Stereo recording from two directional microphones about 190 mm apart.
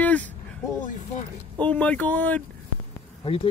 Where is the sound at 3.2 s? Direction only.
30° left (ahead or behind).